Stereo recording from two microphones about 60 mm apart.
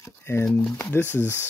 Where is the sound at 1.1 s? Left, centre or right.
Right.